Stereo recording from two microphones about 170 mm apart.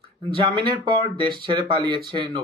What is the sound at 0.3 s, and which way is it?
Speech, 30° right (ahead or behind).